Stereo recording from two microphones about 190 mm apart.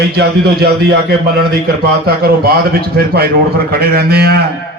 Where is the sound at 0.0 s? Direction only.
55° right (ahead or behind).